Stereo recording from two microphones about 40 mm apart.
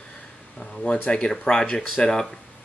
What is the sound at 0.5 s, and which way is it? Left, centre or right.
Speech, left.